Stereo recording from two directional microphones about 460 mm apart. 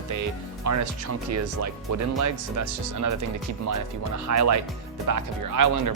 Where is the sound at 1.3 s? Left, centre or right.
Right.